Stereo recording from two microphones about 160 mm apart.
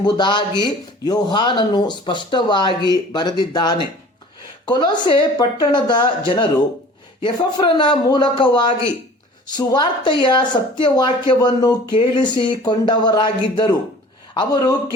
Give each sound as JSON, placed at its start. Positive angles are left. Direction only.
{"t": 0.0, "sound": "speech", "side_deg": 30}